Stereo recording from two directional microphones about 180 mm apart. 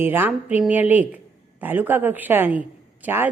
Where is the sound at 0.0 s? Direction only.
10° right (ahead or behind).